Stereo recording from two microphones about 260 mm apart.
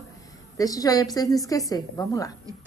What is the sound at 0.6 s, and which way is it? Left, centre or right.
A woman's voice, centre.